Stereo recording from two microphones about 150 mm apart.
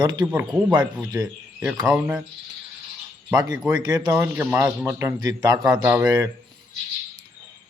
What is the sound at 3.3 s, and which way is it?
Speech, 25° right (ahead or behind).